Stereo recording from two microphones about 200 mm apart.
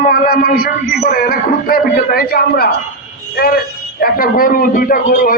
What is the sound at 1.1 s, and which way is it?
A man's voice, 50° left (ahead or behind).